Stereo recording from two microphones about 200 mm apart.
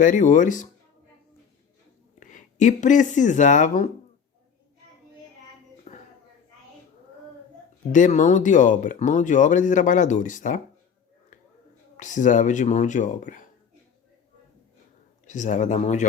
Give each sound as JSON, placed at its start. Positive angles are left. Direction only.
{"t": 0.0, "sound": "speech", "side_deg": 40}
{"t": 2.1, "sound": "speech", "side_deg": 40}
{"t": 5.9, "sound": "a sound", "side_deg": 35}
{"t": 7.9, "sound": "speech", "side_deg": 40}
{"t": 11.9, "sound": "speech", "side_deg": 40}
{"t": 15.3, "sound": "speech", "side_deg": 40}